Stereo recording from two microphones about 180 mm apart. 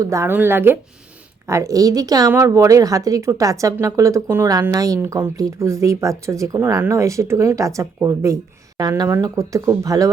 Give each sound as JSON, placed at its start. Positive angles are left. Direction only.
{"t": 0.0, "sound": "a woman's voice", "side_deg": -15}